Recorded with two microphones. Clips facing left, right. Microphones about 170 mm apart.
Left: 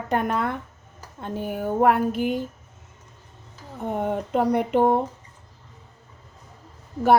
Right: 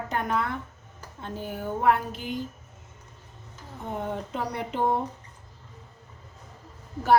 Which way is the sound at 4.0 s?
55° left (ahead or behind).